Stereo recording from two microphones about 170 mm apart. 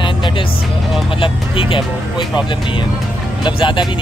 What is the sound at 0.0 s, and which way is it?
Music, 30° left (ahead or behind).